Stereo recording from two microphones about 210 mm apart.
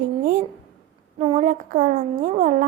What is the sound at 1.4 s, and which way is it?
A woman's voice, 35° right (ahead or behind).